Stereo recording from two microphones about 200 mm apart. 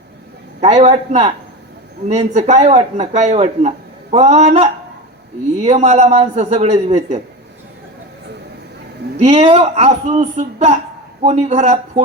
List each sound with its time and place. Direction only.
0.6 s speech: 35° right (ahead or behind)
9.1 s speech: 30° right (ahead or behind)